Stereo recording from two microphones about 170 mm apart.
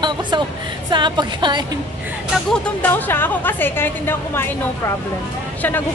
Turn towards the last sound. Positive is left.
turn(degrees=15)  # may be behind; listen again after turning